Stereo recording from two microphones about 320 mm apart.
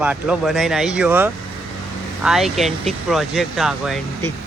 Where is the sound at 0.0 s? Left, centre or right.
Centre.